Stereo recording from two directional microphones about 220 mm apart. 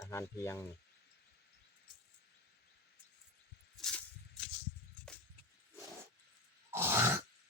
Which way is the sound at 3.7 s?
5° left (ahead or behind).